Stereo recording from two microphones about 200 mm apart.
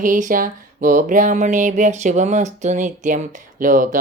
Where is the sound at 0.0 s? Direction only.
40° right (ahead or behind).